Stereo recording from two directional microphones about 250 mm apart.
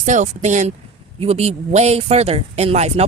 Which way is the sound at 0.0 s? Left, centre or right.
Right.